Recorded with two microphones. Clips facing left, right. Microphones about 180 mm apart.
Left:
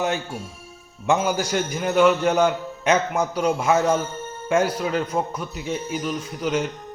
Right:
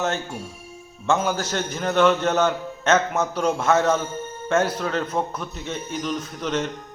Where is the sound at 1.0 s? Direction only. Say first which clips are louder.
Left 1 dB; 15° left (ahead or behind).